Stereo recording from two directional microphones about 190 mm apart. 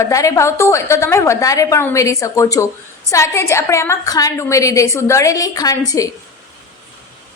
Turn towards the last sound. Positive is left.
turn(degrees=20)  # may be behind; listen again after turning